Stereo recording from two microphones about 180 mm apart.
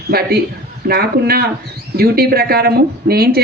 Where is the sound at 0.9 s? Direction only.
60° right (ahead or behind).